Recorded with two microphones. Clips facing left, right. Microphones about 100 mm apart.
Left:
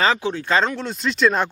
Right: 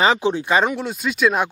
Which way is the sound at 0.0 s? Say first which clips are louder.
Right 3 dB; 20° right (ahead or behind).